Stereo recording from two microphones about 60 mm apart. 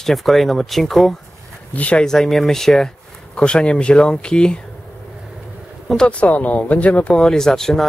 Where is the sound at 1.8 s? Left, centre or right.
Left.